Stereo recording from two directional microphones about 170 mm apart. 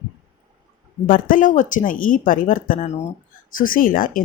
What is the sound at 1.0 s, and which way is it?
Speech, 55° left (ahead or behind).